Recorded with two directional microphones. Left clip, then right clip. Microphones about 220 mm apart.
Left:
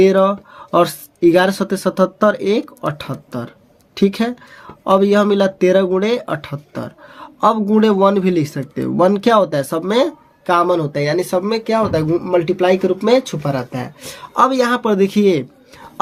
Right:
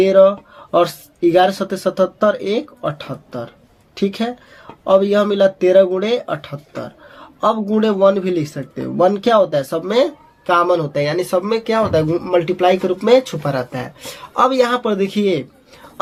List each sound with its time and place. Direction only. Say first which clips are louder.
0.0 s speech: right 2 dB; 40° left (ahead or behind)